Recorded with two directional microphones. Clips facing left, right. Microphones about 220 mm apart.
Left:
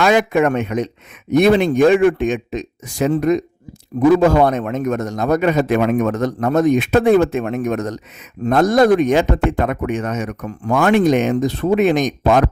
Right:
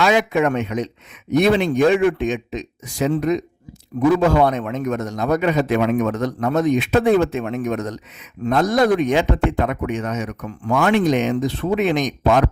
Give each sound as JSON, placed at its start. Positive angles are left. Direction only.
{"t": 0.0, "sound": "speech", "side_deg": 50}